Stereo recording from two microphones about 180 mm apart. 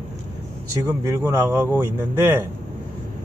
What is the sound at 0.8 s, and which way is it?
Speech, 15° right (ahead or behind).